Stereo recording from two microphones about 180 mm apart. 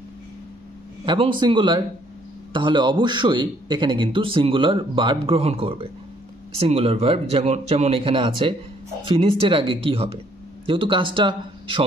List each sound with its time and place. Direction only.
1.0 s a man's voice: 25° right (ahead or behind)